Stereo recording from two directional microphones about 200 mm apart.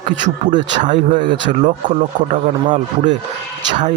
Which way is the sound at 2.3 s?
40° right (ahead or behind).